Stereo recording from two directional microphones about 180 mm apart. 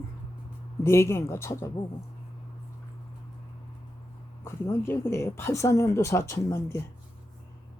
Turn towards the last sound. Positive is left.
turn(degrees=15)  # may be behind; listen again after turning